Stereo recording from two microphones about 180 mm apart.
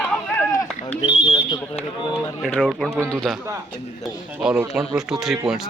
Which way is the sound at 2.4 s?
5° left (ahead or behind).